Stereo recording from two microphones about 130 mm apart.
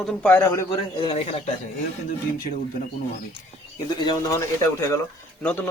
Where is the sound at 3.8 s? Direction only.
35° left (ahead or behind).